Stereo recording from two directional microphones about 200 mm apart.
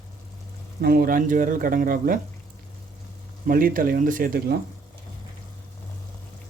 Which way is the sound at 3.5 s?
45° right (ahead or behind).